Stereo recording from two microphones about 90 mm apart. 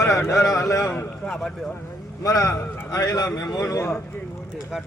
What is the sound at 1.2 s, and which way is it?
Speech, 5° left (ahead or behind).